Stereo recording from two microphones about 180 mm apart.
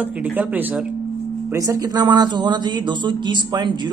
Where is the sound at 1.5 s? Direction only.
20° right (ahead or behind).